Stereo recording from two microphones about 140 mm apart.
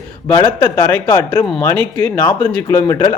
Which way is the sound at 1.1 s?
30° left (ahead or behind).